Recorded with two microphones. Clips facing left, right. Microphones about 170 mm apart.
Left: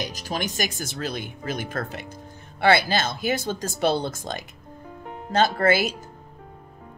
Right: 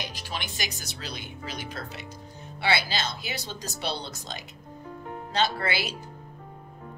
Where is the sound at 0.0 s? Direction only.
45° left (ahead or behind).